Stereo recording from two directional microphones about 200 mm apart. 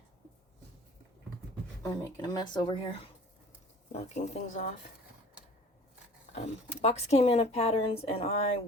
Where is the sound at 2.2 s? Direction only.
20° left (ahead or behind).